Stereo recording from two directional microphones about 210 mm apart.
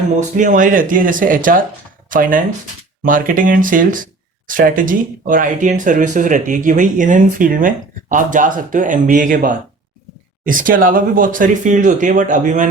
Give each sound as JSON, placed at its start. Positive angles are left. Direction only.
{"t": 0.2, "sound": "speech", "side_deg": -35}